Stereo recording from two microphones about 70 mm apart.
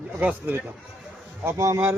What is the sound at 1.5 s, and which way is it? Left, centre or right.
Speech, right.